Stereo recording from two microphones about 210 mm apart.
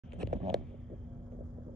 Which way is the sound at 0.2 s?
Centre (ahead or behind).